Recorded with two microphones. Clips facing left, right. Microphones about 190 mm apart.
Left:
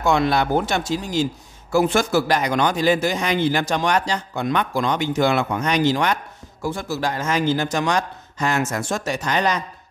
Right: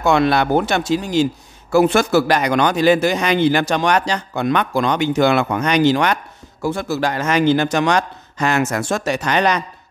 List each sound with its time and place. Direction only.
0.0 s speech: 70° right (ahead or behind)